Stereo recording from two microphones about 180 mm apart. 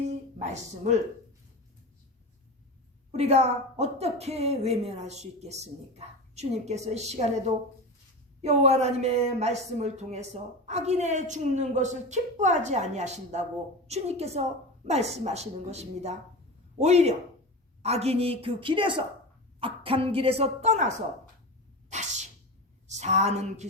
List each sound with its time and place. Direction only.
3.1 s a woman's voice: 35° right (ahead or behind)
8.4 s a woman's voice: 35° right (ahead or behind)
21.8 s sneeze: 40° right (ahead or behind)
22.9 s a woman's voice: 40° right (ahead or behind)